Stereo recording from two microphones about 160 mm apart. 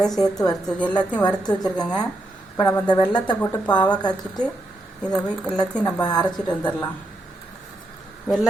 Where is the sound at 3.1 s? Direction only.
30° left (ahead or behind).